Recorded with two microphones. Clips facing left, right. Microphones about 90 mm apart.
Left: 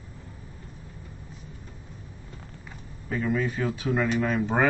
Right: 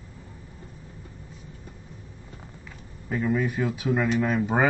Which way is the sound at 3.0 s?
10° right (ahead or behind).